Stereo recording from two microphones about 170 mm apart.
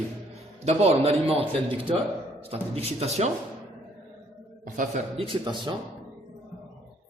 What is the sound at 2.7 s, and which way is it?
Speech, 35° right (ahead or behind).